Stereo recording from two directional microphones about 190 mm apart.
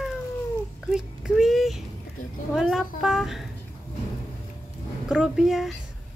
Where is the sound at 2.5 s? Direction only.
5° right (ahead or behind).